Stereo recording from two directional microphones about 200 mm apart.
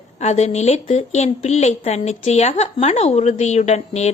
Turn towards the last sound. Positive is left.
turn(degrees=35)  # may be behind; listen again after turning